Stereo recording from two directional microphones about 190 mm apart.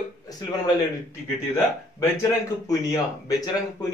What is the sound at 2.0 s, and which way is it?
Speech, 15° left (ahead or behind).